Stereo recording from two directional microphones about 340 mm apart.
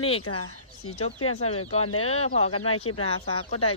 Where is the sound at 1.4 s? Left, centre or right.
Centre.